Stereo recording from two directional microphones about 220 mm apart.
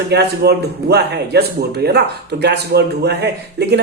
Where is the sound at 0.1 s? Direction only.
50° right (ahead or behind).